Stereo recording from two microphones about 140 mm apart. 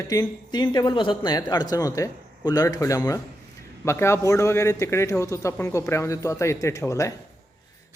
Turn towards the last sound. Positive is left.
turn(degrees=20)  # may be behind; listen again after turning